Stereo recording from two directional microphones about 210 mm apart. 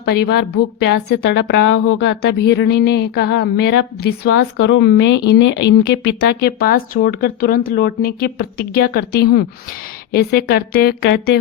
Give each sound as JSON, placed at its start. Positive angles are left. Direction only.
{"t": 0.5, "sound": "a woman's voice", "side_deg": 55}